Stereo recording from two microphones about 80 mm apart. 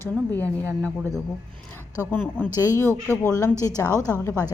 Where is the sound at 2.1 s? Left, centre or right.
Left.